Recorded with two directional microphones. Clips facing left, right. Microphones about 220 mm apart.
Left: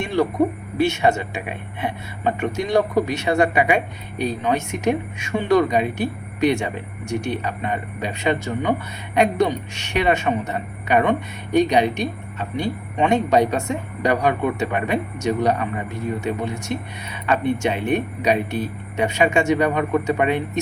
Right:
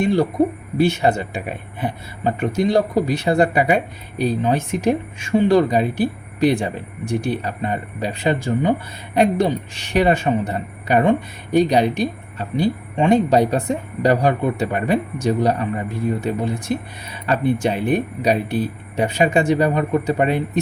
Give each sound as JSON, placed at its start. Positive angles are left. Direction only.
{"t": 0.8, "sound": "speech", "side_deg": -35}